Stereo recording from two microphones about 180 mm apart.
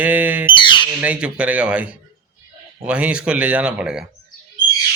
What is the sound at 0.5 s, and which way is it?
Squawk, 25° left (ahead or behind).